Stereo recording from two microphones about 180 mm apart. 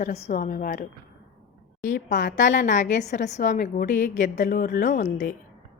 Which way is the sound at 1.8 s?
45° left (ahead or behind).